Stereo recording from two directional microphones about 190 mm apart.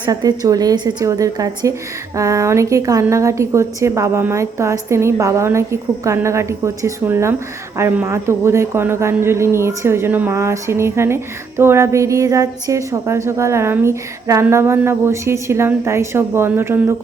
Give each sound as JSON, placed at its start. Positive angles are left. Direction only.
{"t": 0.0, "sound": "a woman's voice", "side_deg": -20}